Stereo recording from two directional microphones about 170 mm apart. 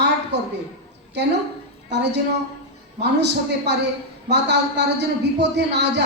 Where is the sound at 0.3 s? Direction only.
90° right.